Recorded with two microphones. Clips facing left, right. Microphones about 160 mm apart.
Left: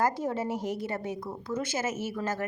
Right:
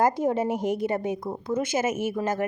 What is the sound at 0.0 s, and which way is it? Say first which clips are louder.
A woman's voice: right 6 dB; 15° right (ahead or behind).